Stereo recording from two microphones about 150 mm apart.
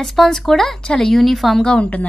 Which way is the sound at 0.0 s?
Centre (ahead or behind).